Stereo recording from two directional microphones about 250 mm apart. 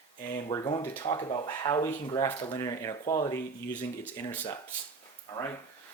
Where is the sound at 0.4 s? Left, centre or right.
Centre.